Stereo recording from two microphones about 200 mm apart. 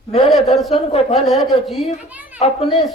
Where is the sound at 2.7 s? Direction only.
Centre (ahead or behind).